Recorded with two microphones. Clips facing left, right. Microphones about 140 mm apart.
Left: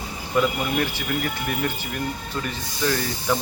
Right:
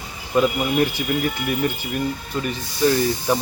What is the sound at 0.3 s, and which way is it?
Speech, 20° right (ahead or behind).